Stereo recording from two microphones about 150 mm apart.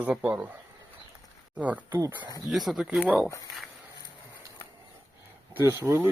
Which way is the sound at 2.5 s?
Centre (ahead or behind).